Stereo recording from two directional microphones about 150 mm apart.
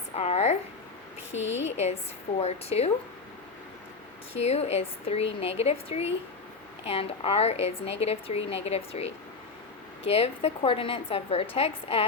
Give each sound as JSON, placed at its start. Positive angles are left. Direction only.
{"t": 0.2, "sound": "a sound", "side_deg": 45}
{"t": 1.3, "sound": "a woman's voice", "side_deg": 45}
{"t": 4.4, "sound": "a woman's voice", "side_deg": 45}